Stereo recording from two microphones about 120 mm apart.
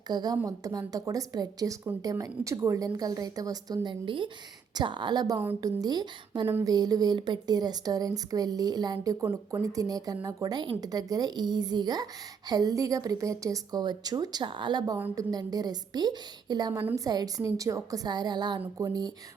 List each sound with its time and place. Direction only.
0.1 s a woman's voice: 35° right (ahead or behind)